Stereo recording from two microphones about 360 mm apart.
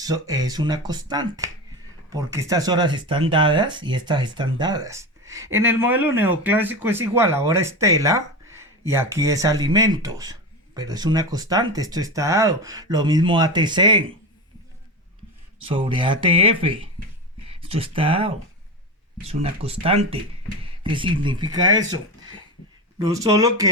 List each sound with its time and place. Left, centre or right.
0.0 s speech: centre
15.6 s speech: centre